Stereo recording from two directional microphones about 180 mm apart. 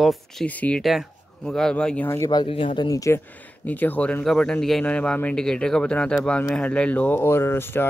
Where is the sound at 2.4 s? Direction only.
30° left (ahead or behind).